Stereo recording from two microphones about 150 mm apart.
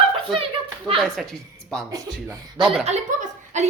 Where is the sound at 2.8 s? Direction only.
50° right (ahead or behind).